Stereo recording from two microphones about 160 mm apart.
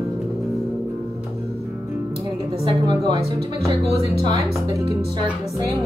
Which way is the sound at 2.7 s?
30° right (ahead or behind).